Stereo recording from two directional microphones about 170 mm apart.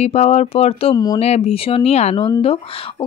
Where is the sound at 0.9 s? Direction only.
20° left (ahead or behind).